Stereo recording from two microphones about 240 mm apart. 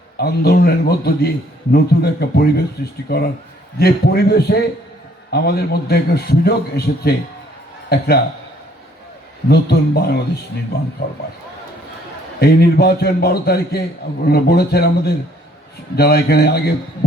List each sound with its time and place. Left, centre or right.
0.2 s a man's voice: left
9.5 s speech: left
12.4 s a man's voice: left